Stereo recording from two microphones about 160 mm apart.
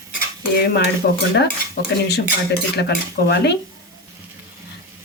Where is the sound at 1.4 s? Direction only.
90° left.